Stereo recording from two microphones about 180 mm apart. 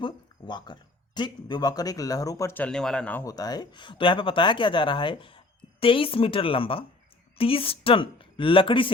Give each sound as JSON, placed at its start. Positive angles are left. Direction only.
{"t": 0.0, "sound": "a woman's voice", "side_deg": 25}